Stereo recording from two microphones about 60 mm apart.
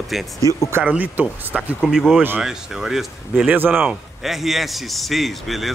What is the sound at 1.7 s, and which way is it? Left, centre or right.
Speech, centre.